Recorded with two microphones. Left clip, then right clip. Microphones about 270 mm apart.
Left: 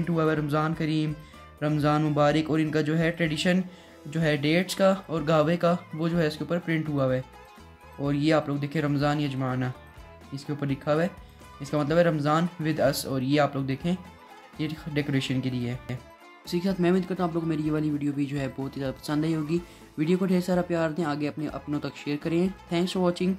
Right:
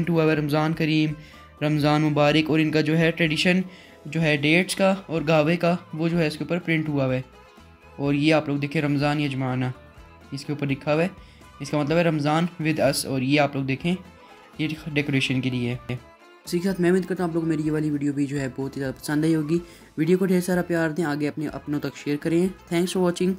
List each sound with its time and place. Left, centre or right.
0.0 s speech: centre